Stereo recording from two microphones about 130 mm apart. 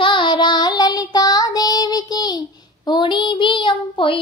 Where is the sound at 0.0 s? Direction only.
40° left (ahead or behind).